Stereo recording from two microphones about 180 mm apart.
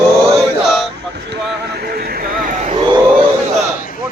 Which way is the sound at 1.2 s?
65° right (ahead or behind).